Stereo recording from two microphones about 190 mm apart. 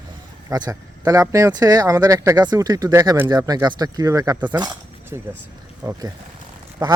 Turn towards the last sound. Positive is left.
turn(degrees=-20)  # may be behind; listen again after turning